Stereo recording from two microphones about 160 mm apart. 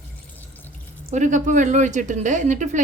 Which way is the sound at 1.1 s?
50° right (ahead or behind).